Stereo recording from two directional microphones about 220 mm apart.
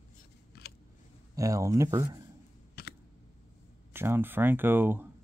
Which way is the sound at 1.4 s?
15° right (ahead or behind).